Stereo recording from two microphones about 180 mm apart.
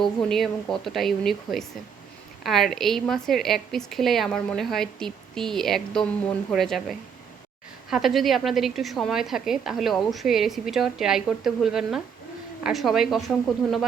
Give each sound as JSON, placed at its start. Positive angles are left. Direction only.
{"t": 0.0, "sound": "a woman's voice", "side_deg": 0}